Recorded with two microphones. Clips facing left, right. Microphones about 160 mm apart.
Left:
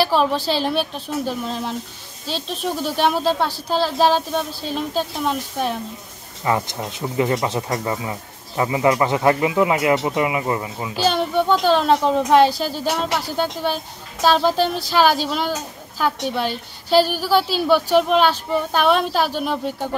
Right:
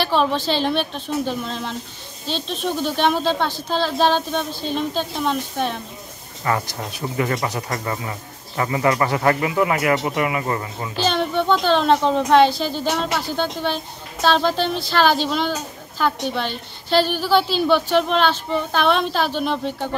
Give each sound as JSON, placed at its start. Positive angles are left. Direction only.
{"t": 0.0, "sound": "speech", "side_deg": 5}
{"t": 6.4, "sound": "speech", "side_deg": 15}